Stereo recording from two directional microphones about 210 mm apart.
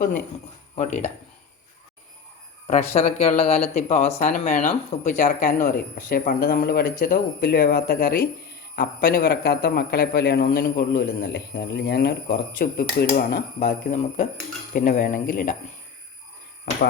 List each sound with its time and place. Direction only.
0.8 s speech: 30° left (ahead or behind)
2.6 s a man's voice: 35° left (ahead or behind)